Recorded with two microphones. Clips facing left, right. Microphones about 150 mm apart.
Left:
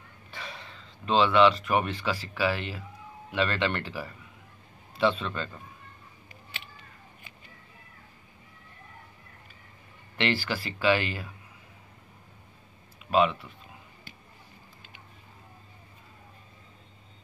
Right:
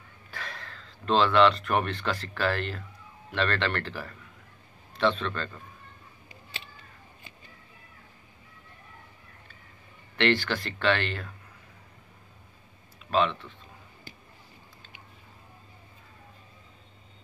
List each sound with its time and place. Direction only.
0.3 s speech: centre (ahead or behind)
10.1 s speech: 5° left (ahead or behind)
13.0 s speech: 10° left (ahead or behind)